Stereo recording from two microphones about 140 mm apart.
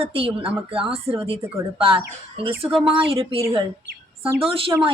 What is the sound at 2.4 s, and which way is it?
Speech, 40° right (ahead or behind).